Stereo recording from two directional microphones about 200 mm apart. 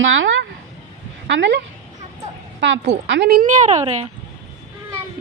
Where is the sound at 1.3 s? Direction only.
60° right (ahead or behind); by 4.1 s 35° right (ahead or behind).